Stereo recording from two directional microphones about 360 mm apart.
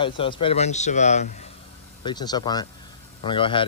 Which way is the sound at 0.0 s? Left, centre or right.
Centre.